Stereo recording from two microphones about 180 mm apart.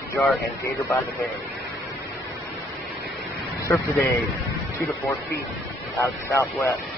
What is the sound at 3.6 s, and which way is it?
Speech, 15° left (ahead or behind).